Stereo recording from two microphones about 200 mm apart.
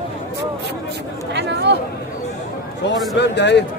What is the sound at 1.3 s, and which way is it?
Chatter, 60° right (ahead or behind).